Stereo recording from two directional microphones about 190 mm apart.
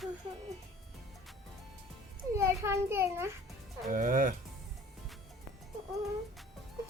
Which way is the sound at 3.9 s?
45° right (ahead or behind).